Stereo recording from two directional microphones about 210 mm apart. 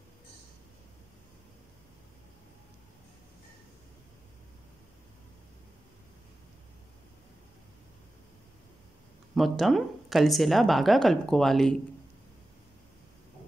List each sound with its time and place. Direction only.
9.3 s speech: centre (ahead or behind)